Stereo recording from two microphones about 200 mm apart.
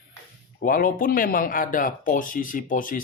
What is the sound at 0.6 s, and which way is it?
Speech, 45° left (ahead or behind).